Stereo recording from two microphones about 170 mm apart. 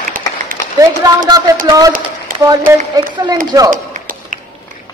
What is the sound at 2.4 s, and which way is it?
A woman's voice, 20° right (ahead or behind).